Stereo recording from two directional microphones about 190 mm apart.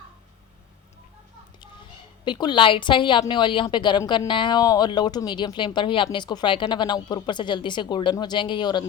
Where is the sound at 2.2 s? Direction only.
25° left (ahead or behind).